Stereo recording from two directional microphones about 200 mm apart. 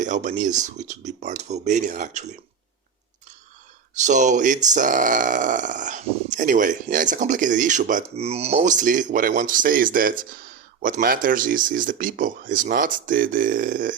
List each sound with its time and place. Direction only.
0.0 s speech: 40° right (ahead or behind)
3.9 s speech: 35° right (ahead or behind)